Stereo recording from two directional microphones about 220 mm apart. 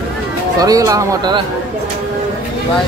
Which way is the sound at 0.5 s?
15° right (ahead or behind).